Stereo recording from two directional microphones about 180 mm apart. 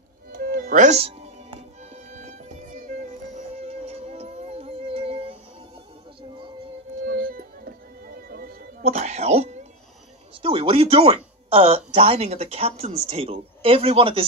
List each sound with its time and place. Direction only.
0.3 s music: 55° right (ahead or behind); by 5.4 s 30° right (ahead or behind)
7.1 s music: 55° right (ahead or behind)
8.8 s a sound: 35° right (ahead or behind)
11.5 s speech: 35° right (ahead or behind)